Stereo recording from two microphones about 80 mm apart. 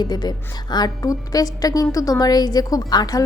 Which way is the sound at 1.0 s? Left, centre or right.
Left.